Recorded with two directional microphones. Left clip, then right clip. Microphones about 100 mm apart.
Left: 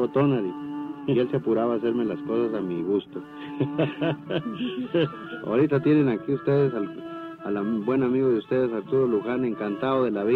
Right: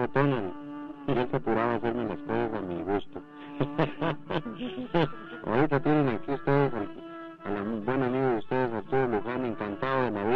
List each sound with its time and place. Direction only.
0.0 s speech: 35° right (ahead or behind)
5.7 s speech: 35° right (ahead or behind)